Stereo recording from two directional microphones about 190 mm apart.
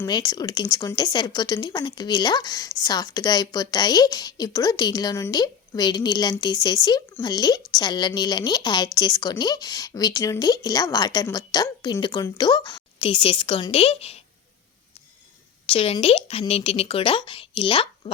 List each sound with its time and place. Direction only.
0.0 s speech: 20° left (ahead or behind)
15.6 s speech: 30° left (ahead or behind)